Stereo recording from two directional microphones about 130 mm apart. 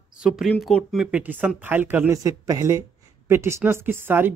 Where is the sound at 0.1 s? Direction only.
5° right (ahead or behind).